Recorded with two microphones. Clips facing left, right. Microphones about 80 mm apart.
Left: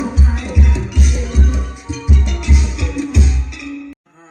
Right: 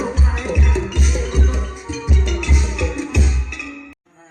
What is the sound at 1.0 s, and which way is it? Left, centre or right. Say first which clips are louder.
Music: even; centre.